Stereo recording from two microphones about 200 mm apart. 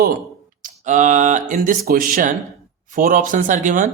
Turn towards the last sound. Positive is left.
turn(degrees=-40)  # may be behind; listen again after turning